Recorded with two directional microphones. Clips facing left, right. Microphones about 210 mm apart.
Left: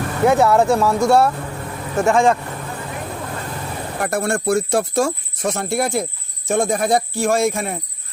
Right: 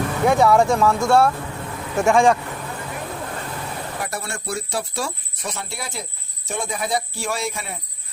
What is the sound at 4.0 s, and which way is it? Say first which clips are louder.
Speech: left 9 dB; 50° left (ahead or behind).